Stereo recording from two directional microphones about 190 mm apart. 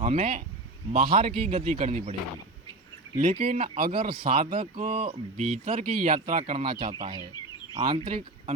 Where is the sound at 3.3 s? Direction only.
35° right (ahead or behind).